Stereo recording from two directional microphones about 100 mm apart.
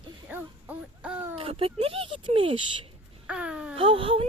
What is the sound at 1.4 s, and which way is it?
Speech, 65° right (ahead or behind).